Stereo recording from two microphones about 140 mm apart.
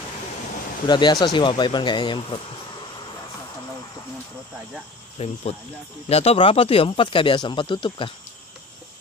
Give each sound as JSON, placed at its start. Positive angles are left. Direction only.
{"t": 0.8, "sound": "speech", "side_deg": 30}
{"t": 5.2, "sound": "speech", "side_deg": 45}